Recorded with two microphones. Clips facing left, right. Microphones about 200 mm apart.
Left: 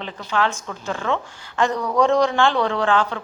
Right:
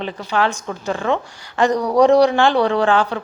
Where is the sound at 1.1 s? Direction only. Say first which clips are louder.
Right 4 dB; 15° right (ahead or behind).